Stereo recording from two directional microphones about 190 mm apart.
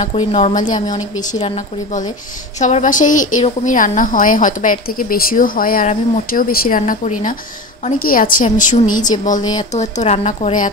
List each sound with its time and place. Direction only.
0.0 s a woman's voice: 30° left (ahead or behind)
9.4 s speech: 20° left (ahead or behind)
9.7 s a woman's voice: 35° left (ahead or behind)